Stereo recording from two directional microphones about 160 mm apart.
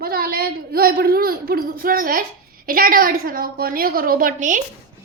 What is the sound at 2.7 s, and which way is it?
A woman's voice, 65° right (ahead or behind).